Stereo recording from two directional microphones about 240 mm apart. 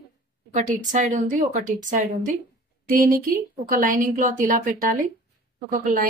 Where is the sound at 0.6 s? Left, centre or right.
Right.